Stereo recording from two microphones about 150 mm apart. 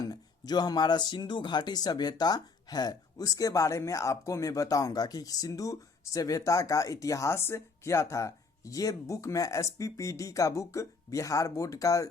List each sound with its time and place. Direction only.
0.0 s speech: 25° left (ahead or behind)